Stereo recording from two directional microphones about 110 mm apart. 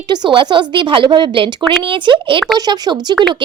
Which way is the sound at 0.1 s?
50° right (ahead or behind).